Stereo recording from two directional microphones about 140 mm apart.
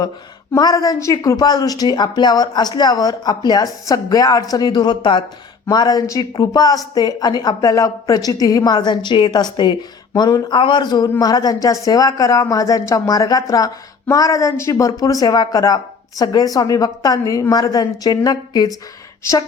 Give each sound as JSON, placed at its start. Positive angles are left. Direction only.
{"t": 0.5, "sound": "speech", "side_deg": 25}
{"t": 10.5, "sound": "speech", "side_deg": 35}